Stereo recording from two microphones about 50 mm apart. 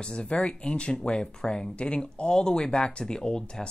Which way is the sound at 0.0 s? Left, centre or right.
Centre.